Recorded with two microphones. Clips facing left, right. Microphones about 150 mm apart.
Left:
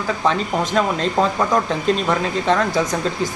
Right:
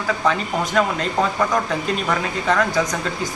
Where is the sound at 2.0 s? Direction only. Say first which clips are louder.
Left 3 dB; 25° left (ahead or behind).